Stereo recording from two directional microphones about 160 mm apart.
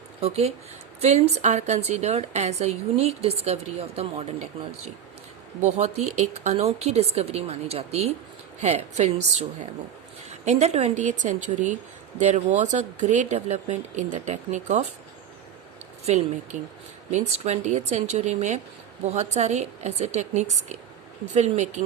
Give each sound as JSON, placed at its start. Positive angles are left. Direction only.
{"t": 0.2, "sound": "a woman's voice", "side_deg": -40}
{"t": 5.6, "sound": "a woman's voice", "side_deg": -45}
{"t": 10.2, "sound": "a woman's voice", "side_deg": -45}
{"t": 16.0, "sound": "a woman's voice", "side_deg": -45}